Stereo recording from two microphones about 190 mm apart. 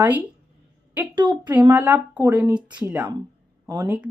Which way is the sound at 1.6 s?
10° right (ahead or behind).